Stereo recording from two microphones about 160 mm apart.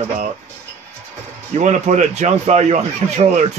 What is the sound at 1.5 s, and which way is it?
Speech, 45° right (ahead or behind).